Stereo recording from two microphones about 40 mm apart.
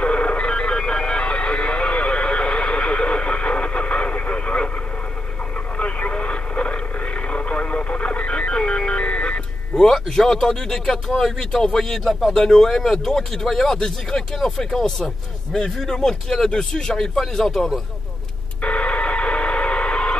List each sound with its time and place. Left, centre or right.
0.0 s a sound: left
5.8 s radio: left
9.8 s speech: centre
18.6 s telephone dialing: left